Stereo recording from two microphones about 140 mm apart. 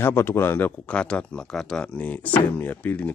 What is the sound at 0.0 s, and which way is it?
Speech, 15° left (ahead or behind).